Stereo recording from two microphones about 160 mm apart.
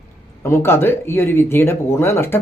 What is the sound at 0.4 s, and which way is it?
Speech, 15° left (ahead or behind).